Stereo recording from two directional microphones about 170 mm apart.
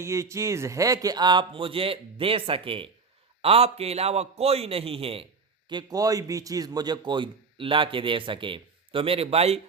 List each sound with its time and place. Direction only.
0.0 s a man's voice: 15° right (ahead or behind); by 9.6 s 35° right (ahead or behind)